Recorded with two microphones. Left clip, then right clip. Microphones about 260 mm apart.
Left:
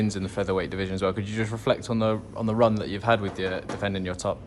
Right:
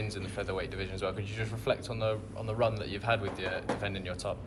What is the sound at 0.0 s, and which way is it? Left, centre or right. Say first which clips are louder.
Speech: left 8 dB; left.